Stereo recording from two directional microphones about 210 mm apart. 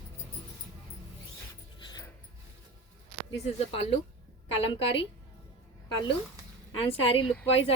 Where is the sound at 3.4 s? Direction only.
30° left (ahead or behind).